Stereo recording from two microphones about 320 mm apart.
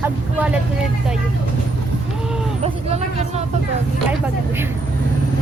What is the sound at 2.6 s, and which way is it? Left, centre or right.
Vehicle, centre.